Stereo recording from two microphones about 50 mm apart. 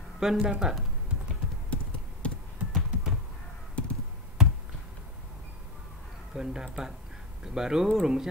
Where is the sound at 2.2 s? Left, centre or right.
Left.